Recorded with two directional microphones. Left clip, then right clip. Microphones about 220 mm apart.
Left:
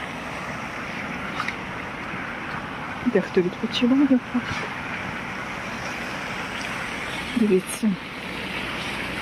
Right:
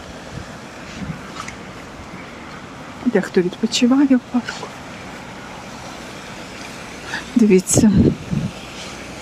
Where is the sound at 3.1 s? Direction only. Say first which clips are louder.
Right 4 dB; 30° right (ahead or behind).